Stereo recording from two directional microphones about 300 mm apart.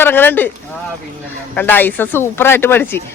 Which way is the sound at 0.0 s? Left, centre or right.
Centre.